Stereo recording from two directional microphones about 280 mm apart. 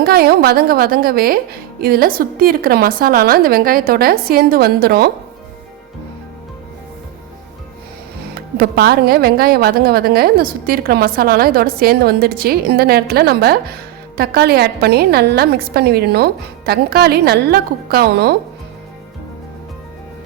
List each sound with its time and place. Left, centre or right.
0.0 s speech: right
8.4 s speech: right